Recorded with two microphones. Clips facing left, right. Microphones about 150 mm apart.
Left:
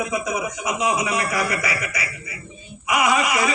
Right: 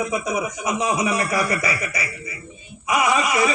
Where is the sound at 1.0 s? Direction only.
30° right (ahead or behind).